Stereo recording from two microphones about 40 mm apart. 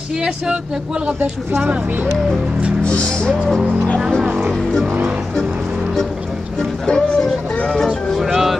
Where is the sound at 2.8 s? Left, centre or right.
Left.